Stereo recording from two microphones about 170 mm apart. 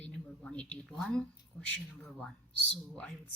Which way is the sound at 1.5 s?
20° left (ahead or behind).